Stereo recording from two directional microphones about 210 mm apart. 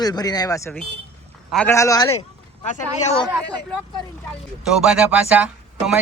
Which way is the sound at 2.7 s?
30° left (ahead or behind).